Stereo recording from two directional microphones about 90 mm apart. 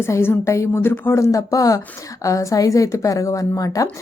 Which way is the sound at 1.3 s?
40° left (ahead or behind).